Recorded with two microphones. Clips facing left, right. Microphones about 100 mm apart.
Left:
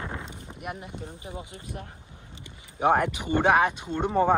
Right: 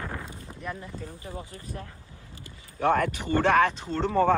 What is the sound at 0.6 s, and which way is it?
Speech, 20° left (ahead or behind).